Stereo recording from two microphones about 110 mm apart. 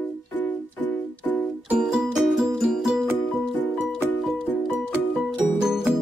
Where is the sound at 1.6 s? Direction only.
5° right (ahead or behind).